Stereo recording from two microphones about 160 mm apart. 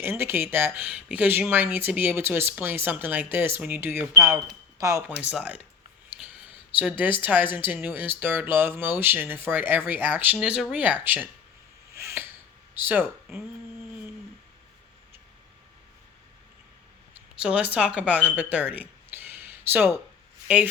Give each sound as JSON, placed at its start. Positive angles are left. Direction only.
{"t": 0.0, "sound": "speech", "side_deg": -15}
{"t": 5.1, "sound": "speech", "side_deg": -5}
{"t": 6.1, "sound": "a sound", "side_deg": -10}
{"t": 6.7, "sound": "speech", "side_deg": -10}
{"t": 11.9, "sound": "a sound", "side_deg": -15}
{"t": 12.7, "sound": "speech", "side_deg": -10}
{"t": 17.3, "sound": "speech", "side_deg": -5}